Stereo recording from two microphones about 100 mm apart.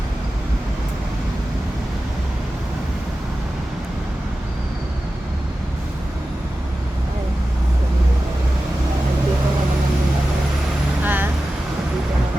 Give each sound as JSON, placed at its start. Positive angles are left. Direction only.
{"t": 11.0, "sound": "vehicle", "side_deg": -20}